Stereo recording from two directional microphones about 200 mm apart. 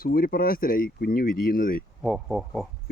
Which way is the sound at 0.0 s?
50° left (ahead or behind).